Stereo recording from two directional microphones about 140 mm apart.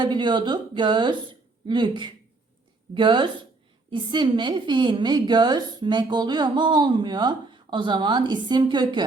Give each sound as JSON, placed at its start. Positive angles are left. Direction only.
{"t": 0.0, "sound": "a woman's voice", "side_deg": -35}